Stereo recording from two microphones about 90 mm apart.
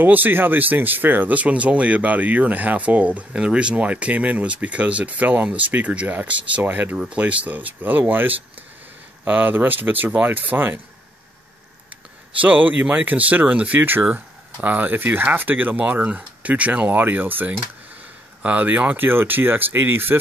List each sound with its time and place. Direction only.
0.0 s speech: 20° right (ahead or behind)
12.4 s speech: 15° right (ahead or behind)